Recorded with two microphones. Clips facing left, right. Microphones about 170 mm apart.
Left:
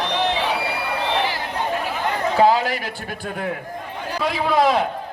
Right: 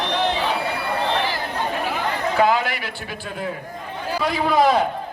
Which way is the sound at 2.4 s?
35° left (ahead or behind).